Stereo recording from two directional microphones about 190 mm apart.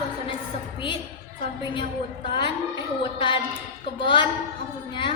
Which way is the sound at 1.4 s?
25° left (ahead or behind).